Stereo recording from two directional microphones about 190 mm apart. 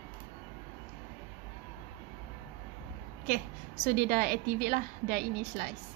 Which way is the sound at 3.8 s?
50° right (ahead or behind).